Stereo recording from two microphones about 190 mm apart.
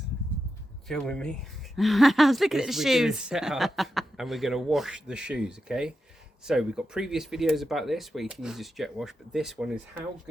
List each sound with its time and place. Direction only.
0.9 s speech: 5° left (ahead or behind)